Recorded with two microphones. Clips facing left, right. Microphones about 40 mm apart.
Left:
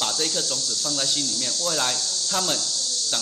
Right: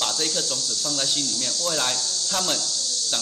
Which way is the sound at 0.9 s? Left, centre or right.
Centre.